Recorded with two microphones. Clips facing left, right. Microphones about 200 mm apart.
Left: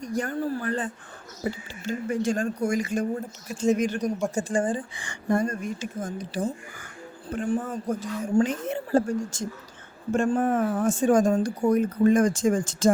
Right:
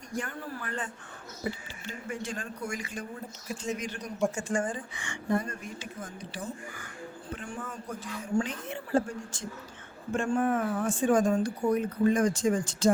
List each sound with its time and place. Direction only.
0.0 s speech: 40° left (ahead or behind)
1.9 s speech: 45° left (ahead or behind)
4.4 s speech: 35° left (ahead or behind)
5.3 s speech: 45° left (ahead or behind)